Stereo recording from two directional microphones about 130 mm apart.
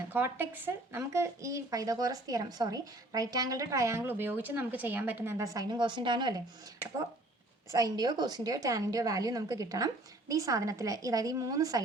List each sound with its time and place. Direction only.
0.1 s a woman's voice: 15° right (ahead or behind); by 6.4 s 35° right (ahead or behind)
7.7 s a woman's voice: 25° right (ahead or behind)